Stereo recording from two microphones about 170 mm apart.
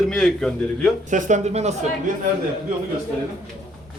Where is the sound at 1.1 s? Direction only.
45° right (ahead or behind).